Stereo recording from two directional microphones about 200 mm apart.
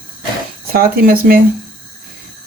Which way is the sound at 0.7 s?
50° right (ahead or behind).